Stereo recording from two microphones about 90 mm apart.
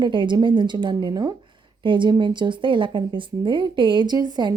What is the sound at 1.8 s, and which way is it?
A woman's voice, 60° right (ahead or behind).